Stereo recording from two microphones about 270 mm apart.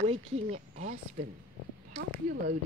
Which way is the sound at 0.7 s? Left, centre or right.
Right.